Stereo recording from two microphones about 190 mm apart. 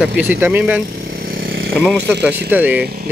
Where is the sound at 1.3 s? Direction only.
55° right (ahead or behind).